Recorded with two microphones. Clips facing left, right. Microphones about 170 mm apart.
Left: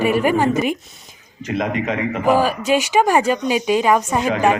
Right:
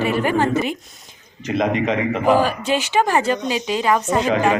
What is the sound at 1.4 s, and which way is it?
Speech, 25° right (ahead or behind).